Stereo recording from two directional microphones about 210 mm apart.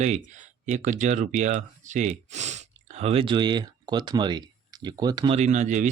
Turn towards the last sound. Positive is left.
turn(degrees=-35)  # may be behind; listen again after turning